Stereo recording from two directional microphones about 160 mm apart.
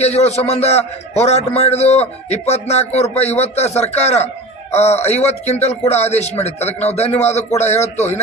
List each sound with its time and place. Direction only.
0.0 s a man's voice: 40° left (ahead or behind)